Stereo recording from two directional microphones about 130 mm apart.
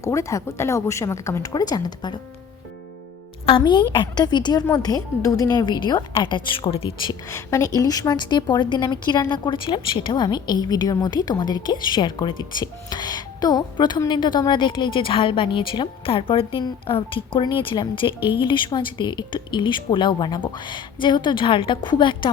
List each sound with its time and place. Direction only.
0.0 s a woman's voice: 20° left (ahead or behind)
3.6 s a woman's voice: 35° left (ahead or behind)
7.3 s a woman's voice: 25° left (ahead or behind)